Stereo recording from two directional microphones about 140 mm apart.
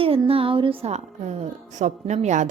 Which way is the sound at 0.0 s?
40° right (ahead or behind).